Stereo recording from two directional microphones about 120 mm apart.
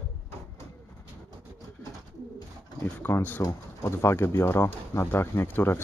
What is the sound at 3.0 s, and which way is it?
Speech, 15° left (ahead or behind).